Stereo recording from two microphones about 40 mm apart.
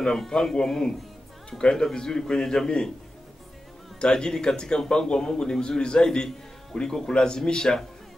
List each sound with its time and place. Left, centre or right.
0.3 s speech: centre
4.0 s speech: centre